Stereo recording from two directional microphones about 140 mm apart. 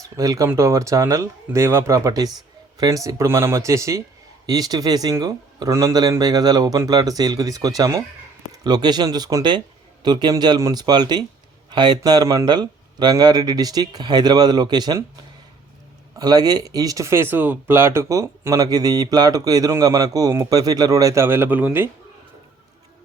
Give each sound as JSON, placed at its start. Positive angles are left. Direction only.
{"t": 0.2, "sound": "speech", "side_deg": -25}
{"t": 16.1, "sound": "speech", "side_deg": -30}